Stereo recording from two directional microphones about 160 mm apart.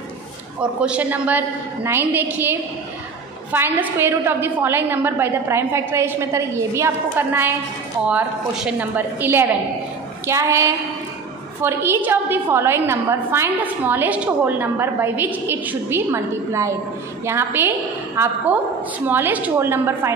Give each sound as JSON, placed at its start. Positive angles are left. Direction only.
{"t": 0.6, "sound": "a woman's voice", "side_deg": -5}
{"t": 3.5, "sound": "a woman's voice", "side_deg": -15}